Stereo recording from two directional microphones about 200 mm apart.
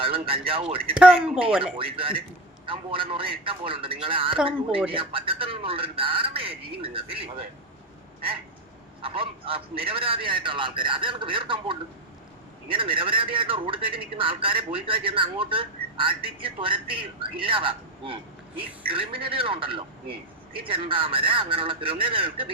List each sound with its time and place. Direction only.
0.0 s a man's voice: 25° right (ahead or behind)
0.9 s speech: 5° right (ahead or behind)
1.8 s a man's voice: 25° right (ahead or behind)
9.0 s a man's voice: 25° right (ahead or behind)